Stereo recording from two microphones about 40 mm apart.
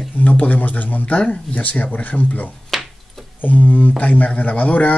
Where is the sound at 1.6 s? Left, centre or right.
Left.